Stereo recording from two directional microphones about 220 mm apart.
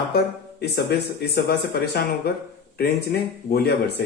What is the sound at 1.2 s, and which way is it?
Speech, 45° left (ahead or behind).